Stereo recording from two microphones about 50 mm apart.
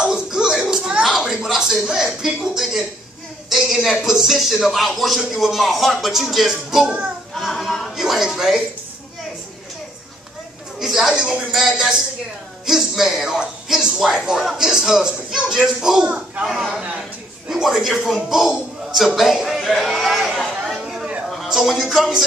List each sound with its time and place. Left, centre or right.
0.0 s slap: centre
1.0 s a sound: centre
2.0 s speech: centre
7.3 s a sound: centre
10.8 s a man's voice: centre
16.1 s a man's voice: right
16.4 s a man's voice: centre
20.6 s a sound: centre
21.4 s speech: centre